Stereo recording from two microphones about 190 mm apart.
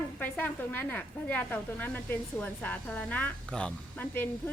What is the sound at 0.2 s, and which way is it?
A woman's voice, 10° left (ahead or behind).